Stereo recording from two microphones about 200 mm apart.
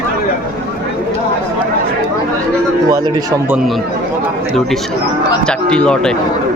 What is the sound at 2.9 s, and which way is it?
Speech, 15° right (ahead or behind).